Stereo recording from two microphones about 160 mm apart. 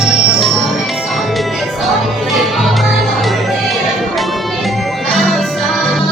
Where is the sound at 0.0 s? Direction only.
Centre (ahead or behind).